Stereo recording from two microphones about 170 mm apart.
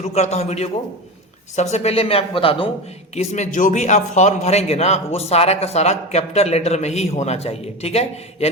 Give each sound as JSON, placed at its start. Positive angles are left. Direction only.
{"t": 0.0, "sound": "a man's voice", "side_deg": 40}
{"t": 3.2, "sound": "a man's voice", "side_deg": 45}